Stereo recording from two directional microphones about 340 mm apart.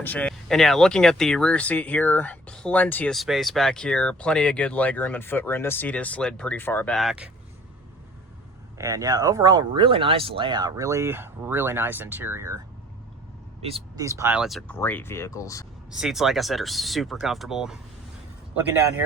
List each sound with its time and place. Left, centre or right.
0.0 s speech: centre
8.8 s speech: centre
13.6 s speech: centre
15.9 s speech: centre